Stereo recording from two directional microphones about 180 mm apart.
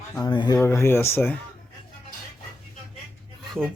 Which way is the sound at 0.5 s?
15° left (ahead or behind).